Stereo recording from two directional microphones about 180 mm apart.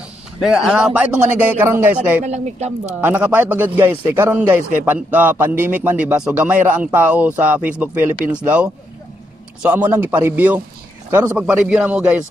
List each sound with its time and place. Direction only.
0.4 s speech: 5° right (ahead or behind)
2.2 s a woman's voice: 40° right (ahead or behind)
3.0 s speech: 10° right (ahead or behind)
9.6 s speech: 10° right (ahead or behind)